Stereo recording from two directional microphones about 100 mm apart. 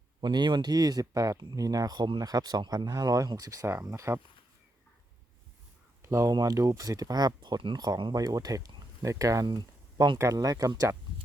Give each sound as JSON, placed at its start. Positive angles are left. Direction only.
{"t": 0.2, "sound": "speech", "side_deg": -45}
{"t": 6.0, "sound": "a sound", "side_deg": -30}
{"t": 6.3, "sound": "speech", "side_deg": -35}
{"t": 10.2, "sound": "speech", "side_deg": -35}